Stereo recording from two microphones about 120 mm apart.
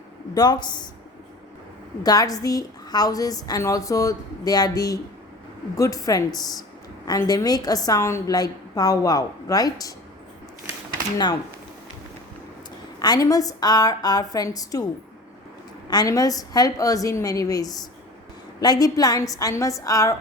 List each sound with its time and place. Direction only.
0.3 s a woman's voice: 35° left (ahead or behind)
2.0 s a woman's voice: 30° left (ahead or behind)
13.0 s a woman's voice: 30° left (ahead or behind)
15.9 s a woman's voice: 30° left (ahead or behind)